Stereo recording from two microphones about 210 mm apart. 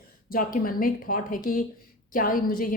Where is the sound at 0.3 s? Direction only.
40° left (ahead or behind).